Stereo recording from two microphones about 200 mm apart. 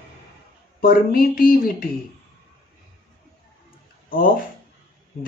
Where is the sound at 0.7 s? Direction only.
45° left (ahead or behind).